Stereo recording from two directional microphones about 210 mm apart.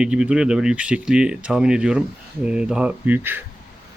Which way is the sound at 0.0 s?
5° right (ahead or behind).